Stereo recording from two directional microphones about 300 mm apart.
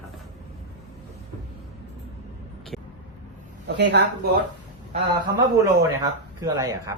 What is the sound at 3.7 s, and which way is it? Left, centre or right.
Speech, right.